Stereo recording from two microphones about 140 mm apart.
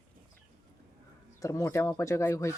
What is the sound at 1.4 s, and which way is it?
Speech, 20° left (ahead or behind).